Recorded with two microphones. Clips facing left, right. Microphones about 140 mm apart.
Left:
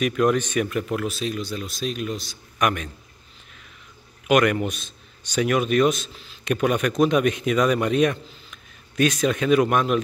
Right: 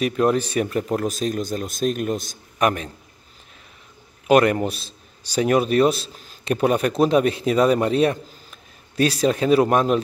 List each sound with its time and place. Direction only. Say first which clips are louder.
0.0 s speech: right 1 dB; 30° right (ahead or behind); by 2.3 s 50° right (ahead or behind)
2.6 s a man's voice: right 3 dB; 35° right (ahead or behind)
4.3 s a man's voice: right 3 dB; 30° right (ahead or behind)